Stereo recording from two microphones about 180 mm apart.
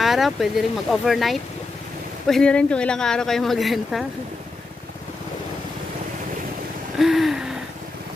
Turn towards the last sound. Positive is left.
turn(degrees=0)  # may be behind; listen again after turning